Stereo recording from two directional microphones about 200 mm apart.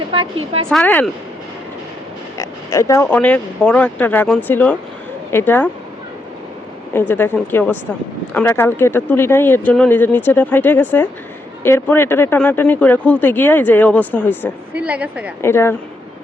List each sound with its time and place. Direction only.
0.1 s a woman's voice: 25° right (ahead or behind)
0.7 s speech: 5° left (ahead or behind)
2.4 s speech: 15° left (ahead or behind)
7.1 s speech: 10° left (ahead or behind)
14.7 s a woman's voice: 5° right (ahead or behind)
15.4 s speech: 10° left (ahead or behind)